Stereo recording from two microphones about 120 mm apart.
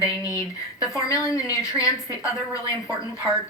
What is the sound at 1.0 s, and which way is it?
A woman's voice, 30° left (ahead or behind).